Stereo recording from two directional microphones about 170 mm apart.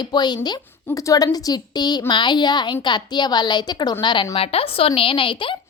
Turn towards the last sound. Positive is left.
turn(degrees=30)  # may be behind; listen again after turning